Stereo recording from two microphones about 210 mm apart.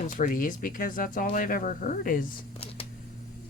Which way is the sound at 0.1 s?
40° left (ahead or behind).